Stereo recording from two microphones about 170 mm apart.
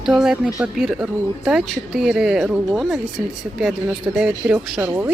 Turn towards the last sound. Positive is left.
turn(degrees=-15)  # may be behind; listen again after turning